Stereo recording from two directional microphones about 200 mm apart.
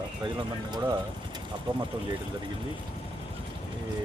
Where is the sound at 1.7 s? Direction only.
25° right (ahead or behind).